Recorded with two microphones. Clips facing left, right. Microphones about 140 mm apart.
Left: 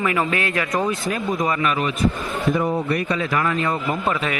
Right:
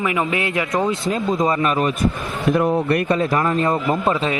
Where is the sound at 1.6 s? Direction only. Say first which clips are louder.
Right 3 dB; 40° right (ahead or behind).